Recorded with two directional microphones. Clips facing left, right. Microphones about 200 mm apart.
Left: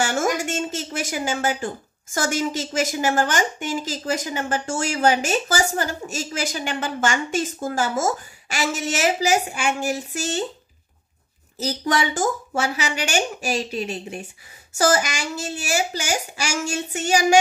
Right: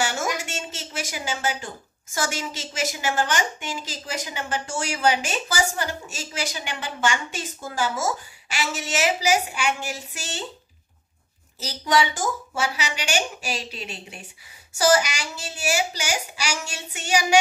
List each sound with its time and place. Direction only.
0.0 s a sound: 50° left (ahead or behind)
2.1 s a woman's voice: 50° left (ahead or behind)
11.6 s a woman's voice: 50° left (ahead or behind)